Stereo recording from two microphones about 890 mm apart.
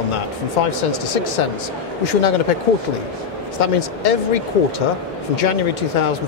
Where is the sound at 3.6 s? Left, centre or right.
Left.